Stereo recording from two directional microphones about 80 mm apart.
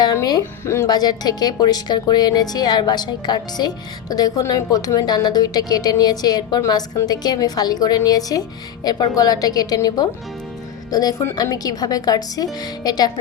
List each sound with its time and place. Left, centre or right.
0.0 s music: left
0.6 s speech: left
0.9 s a woman's voice: left
4.1 s a woman's voice: left
11.4 s speech: left